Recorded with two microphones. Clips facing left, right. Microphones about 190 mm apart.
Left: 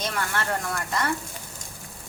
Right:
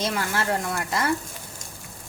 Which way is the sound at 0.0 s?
30° right (ahead or behind).